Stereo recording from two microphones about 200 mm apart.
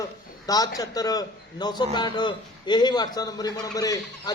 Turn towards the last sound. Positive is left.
turn(degrees=15)  # may be behind; listen again after turning